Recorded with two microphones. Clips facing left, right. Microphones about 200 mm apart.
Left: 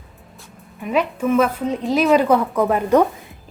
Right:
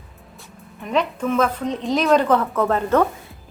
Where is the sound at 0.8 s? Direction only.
5° left (ahead or behind).